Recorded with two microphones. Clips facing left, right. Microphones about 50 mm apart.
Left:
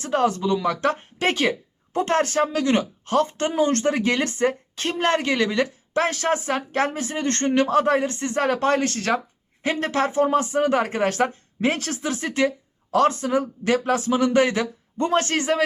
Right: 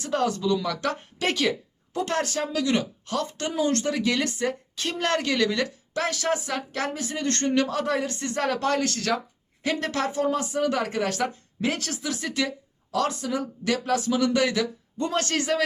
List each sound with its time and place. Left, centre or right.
0.0 s speech: left